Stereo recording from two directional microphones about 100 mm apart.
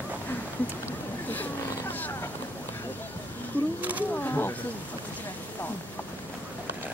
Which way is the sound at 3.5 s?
15° left (ahead or behind).